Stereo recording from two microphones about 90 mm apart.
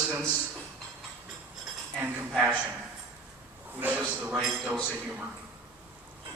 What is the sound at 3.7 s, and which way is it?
Speech, 20° right (ahead or behind).